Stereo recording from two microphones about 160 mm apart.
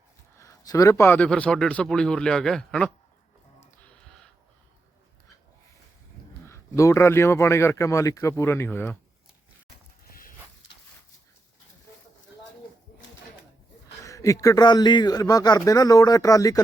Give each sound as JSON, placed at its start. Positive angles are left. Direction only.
{"t": 0.3, "sound": "a man's voice", "side_deg": 20}
{"t": 3.6, "sound": "a sound", "side_deg": 5}
{"t": 6.5, "sound": "a man's voice", "side_deg": 20}
{"t": 14.0, "sound": "a man's voice", "side_deg": 20}